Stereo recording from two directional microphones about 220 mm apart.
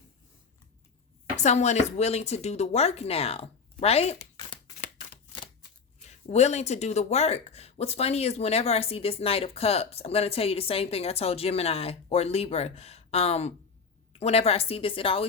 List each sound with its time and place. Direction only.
1.4 s speech: 30° left (ahead or behind)
6.1 s speech: 30° left (ahead or behind)